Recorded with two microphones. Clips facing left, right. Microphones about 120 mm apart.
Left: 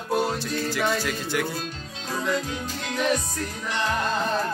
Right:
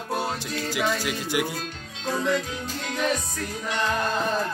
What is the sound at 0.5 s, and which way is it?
Music, 10° right (ahead or behind).